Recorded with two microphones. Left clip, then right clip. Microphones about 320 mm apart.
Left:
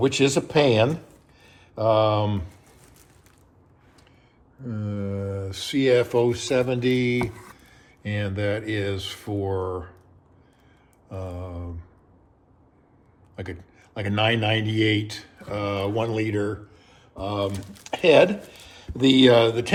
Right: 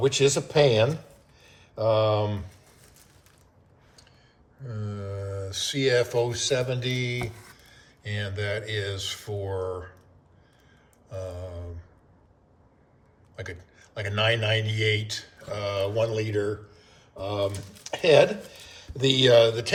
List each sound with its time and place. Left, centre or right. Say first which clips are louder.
0.0 s speech: left 1 dB; left
1.4 s mantra: left 2 dB; left
4.6 s speech: left 5 dB; centre
11.1 s a sound: left 1 dB; centre
13.3 s speech: left 2 dB; centre